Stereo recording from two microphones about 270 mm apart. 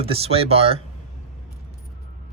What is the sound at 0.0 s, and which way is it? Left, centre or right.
Speech, right.